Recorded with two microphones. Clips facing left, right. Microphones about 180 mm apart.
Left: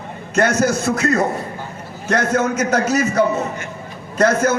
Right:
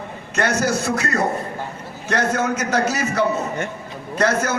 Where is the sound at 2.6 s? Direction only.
45° left (ahead or behind).